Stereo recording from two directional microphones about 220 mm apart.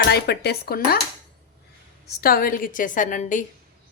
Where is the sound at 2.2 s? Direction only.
40° left (ahead or behind).